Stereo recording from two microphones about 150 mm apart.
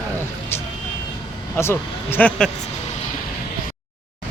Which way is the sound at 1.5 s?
15° left (ahead or behind).